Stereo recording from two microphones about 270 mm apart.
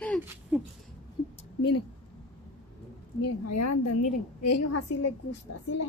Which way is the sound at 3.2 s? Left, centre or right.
Left.